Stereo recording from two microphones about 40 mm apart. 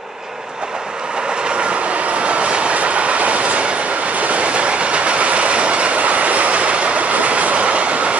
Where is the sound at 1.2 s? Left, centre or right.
Right.